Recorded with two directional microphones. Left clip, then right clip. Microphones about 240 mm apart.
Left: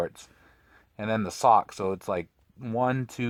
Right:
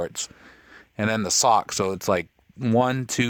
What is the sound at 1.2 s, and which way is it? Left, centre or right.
Speech, right.